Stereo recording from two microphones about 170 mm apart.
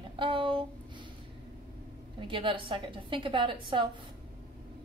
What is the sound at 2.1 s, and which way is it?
A woman's voice, 30° right (ahead or behind).